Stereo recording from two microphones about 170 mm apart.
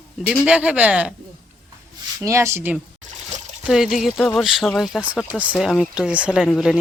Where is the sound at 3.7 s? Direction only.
Centre (ahead or behind).